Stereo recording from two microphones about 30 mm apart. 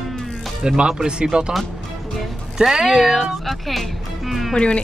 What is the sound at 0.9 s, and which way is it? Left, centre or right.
Speech, right.